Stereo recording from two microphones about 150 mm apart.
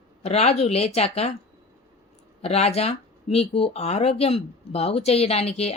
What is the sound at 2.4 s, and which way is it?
Speech, 45° left (ahead or behind).